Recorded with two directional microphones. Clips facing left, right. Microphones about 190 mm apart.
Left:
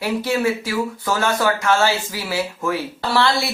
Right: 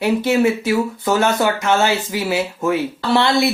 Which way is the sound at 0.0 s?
20° right (ahead or behind).